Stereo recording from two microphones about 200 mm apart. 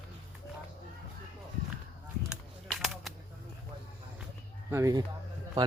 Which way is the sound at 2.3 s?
Centre (ahead or behind).